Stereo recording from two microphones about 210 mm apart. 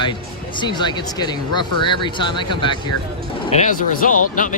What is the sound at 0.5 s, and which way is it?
Speech, 20° left (ahead or behind).